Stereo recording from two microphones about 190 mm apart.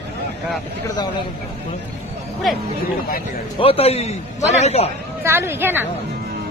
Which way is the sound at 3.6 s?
30° left (ahead or behind).